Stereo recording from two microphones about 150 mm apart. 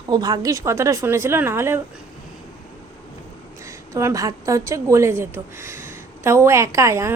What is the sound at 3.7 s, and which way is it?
A woman's voice, 20° right (ahead or behind).